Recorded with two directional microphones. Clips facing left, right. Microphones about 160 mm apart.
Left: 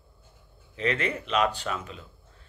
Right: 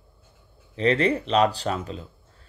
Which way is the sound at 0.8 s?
35° right (ahead or behind).